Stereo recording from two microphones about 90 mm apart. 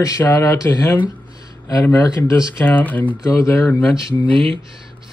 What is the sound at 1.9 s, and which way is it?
Speech, 40° left (ahead or behind).